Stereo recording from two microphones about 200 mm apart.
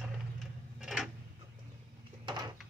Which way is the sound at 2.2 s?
20° right (ahead or behind).